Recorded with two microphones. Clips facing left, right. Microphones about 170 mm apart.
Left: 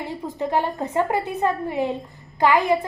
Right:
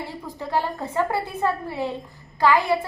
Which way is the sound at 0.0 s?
20° left (ahead or behind).